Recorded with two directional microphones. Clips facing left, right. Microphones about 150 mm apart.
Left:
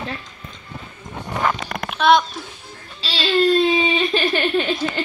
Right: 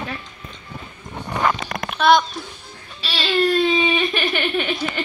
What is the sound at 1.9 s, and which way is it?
Speech, centre (ahead or behind).